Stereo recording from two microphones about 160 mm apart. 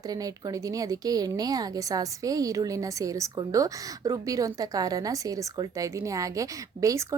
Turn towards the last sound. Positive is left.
turn(degrees=-20)  # may be behind; listen again after turning